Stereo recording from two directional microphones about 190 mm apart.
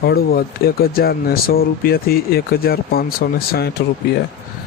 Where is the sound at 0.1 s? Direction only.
55° left (ahead or behind).